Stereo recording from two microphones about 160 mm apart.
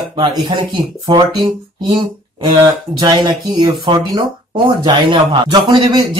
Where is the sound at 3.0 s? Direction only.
25° right (ahead or behind).